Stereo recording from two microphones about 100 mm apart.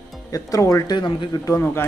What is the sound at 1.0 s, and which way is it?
Speech, 55° left (ahead or behind).